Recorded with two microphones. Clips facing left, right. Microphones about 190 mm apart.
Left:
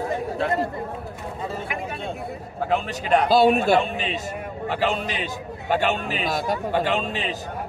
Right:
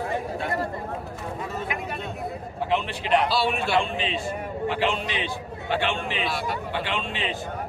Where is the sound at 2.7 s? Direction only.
45° left (ahead or behind).